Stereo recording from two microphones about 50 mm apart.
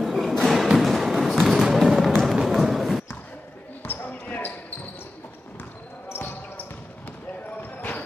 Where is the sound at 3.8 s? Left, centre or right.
Left.